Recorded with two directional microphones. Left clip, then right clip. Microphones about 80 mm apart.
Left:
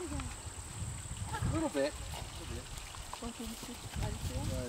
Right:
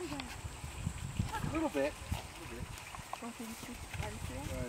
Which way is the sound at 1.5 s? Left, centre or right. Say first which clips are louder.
Left 1 dB; left.